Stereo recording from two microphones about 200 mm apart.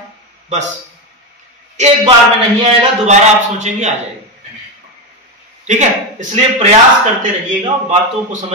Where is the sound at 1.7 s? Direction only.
35° right (ahead or behind).